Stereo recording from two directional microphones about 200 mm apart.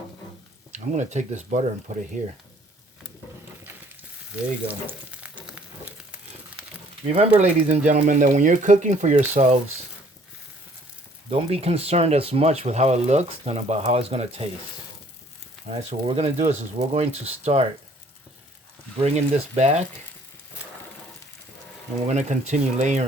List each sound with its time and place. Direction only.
0.7 s speech: 35° right (ahead or behind)
4.4 s frying: 5° right (ahead or behind)
7.2 s speech: 35° right (ahead or behind)
11.3 s speech: 30° right (ahead or behind)
15.6 s speech: 30° right (ahead or behind)
18.9 s speech: 35° right (ahead or behind)
22.0 s speech: 35° right (ahead or behind)